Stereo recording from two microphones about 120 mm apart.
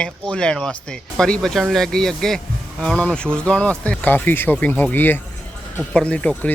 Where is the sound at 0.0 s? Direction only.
10° left (ahead or behind).